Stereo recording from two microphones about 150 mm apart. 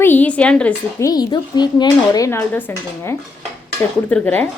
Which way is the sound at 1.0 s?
25° left (ahead or behind).